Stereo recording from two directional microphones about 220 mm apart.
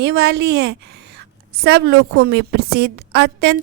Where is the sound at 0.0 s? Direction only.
50° right (ahead or behind).